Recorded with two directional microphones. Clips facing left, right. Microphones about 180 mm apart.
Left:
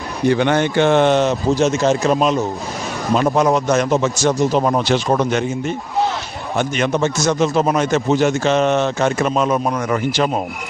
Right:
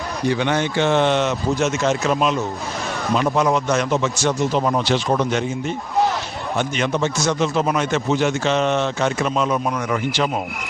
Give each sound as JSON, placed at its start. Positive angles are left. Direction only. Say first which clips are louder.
{"t": 0.3, "sound": "a man's voice", "louder": "left 5 dB", "side_deg": 55}